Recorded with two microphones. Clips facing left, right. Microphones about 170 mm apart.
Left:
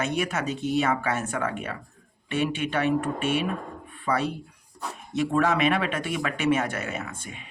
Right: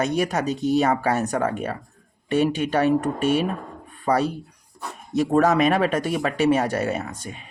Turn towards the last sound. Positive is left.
turn(degrees=-40)  # may be behind; listen again after turning